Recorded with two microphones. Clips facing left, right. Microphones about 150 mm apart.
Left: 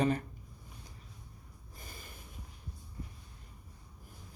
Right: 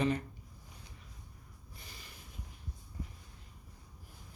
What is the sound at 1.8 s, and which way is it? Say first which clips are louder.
Snort: left 4 dB; 50° left (ahead or behind).